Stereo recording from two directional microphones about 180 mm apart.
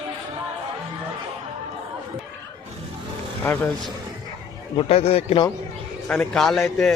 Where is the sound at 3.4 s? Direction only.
10° left (ahead or behind).